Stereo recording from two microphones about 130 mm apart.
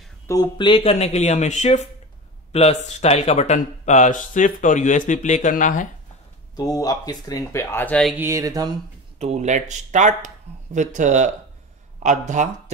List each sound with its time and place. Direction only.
0.3 s speech: 35° left (ahead or behind); by 5.9 s 85° left
6.5 s speech: 30° left (ahead or behind)
8.2 s a sound: 25° right (ahead or behind)
9.2 s speech: 60° right (ahead or behind)